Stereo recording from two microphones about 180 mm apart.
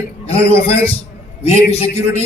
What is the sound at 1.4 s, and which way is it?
Speech, 35° left (ahead or behind).